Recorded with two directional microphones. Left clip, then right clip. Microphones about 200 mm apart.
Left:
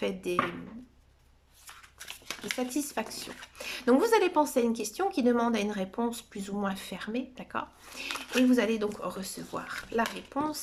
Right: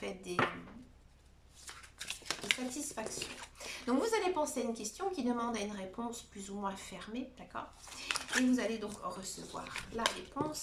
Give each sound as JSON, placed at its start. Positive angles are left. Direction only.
{"t": 0.0, "sound": "a woman's voice", "side_deg": 45}
{"t": 2.7, "sound": "a woman's voice", "side_deg": 45}
{"t": 8.0, "sound": "speech", "side_deg": 0}
{"t": 8.5, "sound": "a woman's voice", "side_deg": 45}